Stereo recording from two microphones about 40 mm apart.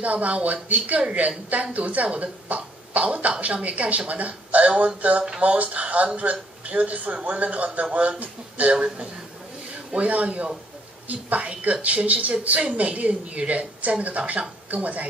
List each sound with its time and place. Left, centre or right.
0.0 s a man's voice: right